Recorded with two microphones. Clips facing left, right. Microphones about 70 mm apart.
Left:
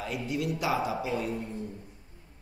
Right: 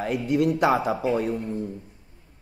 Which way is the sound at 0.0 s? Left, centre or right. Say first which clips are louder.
Right 9 dB; right.